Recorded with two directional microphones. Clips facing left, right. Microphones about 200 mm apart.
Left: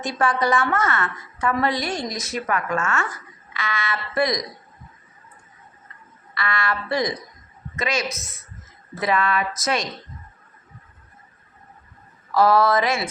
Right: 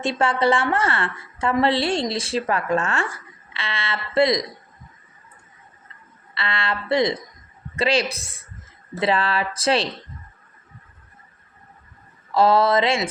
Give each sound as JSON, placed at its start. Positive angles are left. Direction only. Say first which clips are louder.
{"t": 0.0, "sound": "a woman's voice", "louder": "right 2 dB", "side_deg": -25}
{"t": 6.3, "sound": "a woman's voice", "louder": "left 1 dB", "side_deg": -25}
{"t": 12.3, "sound": "a woman's voice", "louder": "even", "side_deg": -25}